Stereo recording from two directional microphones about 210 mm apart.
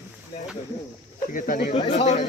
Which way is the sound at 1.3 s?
40° left (ahead or behind).